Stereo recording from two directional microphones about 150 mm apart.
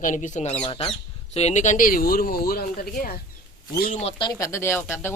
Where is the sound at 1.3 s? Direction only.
50° left (ahead or behind); by 3.1 s 75° left (ahead or behind).